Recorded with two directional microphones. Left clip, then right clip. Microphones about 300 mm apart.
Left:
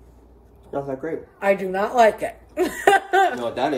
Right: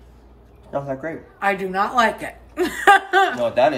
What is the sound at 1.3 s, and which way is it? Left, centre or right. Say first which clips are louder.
Speech: even; centre.